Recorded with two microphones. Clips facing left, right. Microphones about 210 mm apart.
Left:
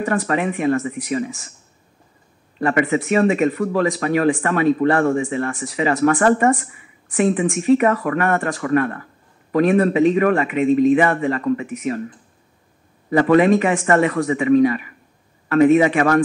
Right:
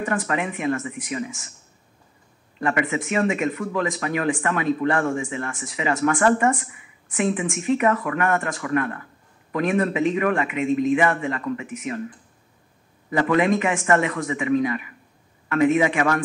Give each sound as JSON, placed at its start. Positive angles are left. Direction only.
{"t": 0.0, "sound": "speech", "side_deg": 40}
{"t": 2.6, "sound": "speech", "side_deg": 40}
{"t": 13.1, "sound": "speech", "side_deg": 40}